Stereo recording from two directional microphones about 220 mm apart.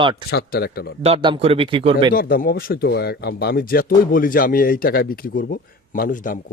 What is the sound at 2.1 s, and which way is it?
Speech, 40° left (ahead or behind).